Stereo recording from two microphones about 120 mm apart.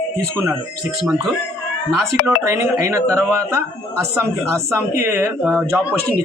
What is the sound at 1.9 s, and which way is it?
Speech, 25° right (ahead or behind).